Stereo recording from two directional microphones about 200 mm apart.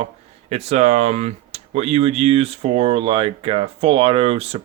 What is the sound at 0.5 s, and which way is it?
Speech, 30° right (ahead or behind).